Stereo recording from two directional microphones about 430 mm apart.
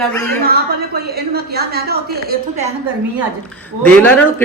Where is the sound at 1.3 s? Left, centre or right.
Right.